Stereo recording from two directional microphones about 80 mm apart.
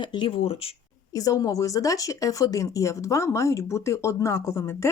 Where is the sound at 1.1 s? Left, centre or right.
Left.